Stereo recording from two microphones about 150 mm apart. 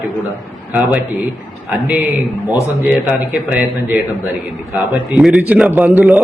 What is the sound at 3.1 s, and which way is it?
A man's voice, 10° right (ahead or behind).